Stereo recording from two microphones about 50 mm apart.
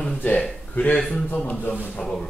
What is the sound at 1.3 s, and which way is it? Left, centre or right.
Speech, left.